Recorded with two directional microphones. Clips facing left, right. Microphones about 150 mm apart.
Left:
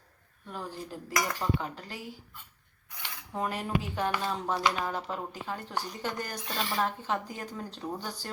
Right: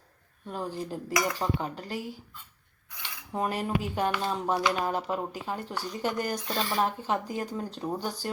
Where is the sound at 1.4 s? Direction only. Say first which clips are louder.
Right 2 dB; 20° right (ahead or behind).